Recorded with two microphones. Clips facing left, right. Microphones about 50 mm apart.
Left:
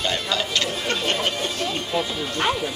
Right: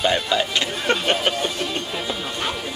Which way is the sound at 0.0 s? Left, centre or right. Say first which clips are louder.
Right 4 dB; centre.